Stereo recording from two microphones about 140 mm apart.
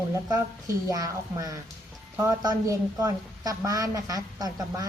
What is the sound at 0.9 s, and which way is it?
A woman's voice, 25° right (ahead or behind).